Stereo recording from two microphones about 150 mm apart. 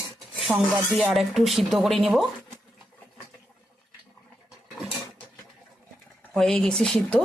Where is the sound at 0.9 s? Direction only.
Centre (ahead or behind).